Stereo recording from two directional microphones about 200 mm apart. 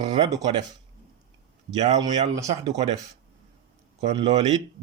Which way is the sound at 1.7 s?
35° right (ahead or behind).